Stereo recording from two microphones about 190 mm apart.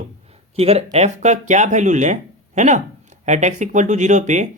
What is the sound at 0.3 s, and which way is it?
Speech, 30° right (ahead or behind).